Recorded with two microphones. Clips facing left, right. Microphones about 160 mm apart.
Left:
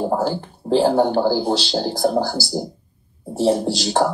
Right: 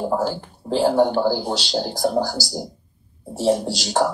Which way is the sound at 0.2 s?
30° left (ahead or behind).